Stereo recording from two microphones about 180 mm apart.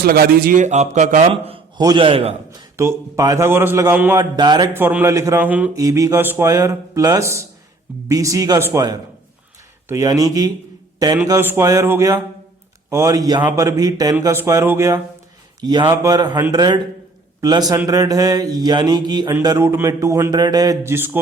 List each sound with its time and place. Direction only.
0.0 s a man's voice: 55° right (ahead or behind); by 2.3 s 30° right (ahead or behind)
2.5 s speech: 20° right (ahead or behind)
4.4 s speech: 25° right (ahead or behind)
15.6 s speech: 25° right (ahead or behind)
19.5 s speech: 10° right (ahead or behind)